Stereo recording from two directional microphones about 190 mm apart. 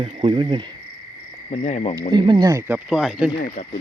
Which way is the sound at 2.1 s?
25° right (ahead or behind).